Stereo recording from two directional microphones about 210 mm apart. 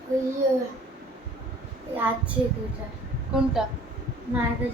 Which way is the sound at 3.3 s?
Centre (ahead or behind).